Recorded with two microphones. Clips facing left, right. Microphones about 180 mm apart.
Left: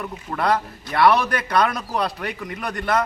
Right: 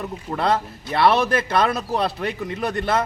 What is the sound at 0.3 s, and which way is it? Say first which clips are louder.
A man's voice: even; 25° right (ahead or behind).